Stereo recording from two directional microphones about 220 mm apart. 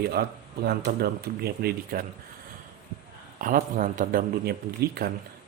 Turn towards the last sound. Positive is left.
turn(degrees=-45)  # may be behind; listen again after turning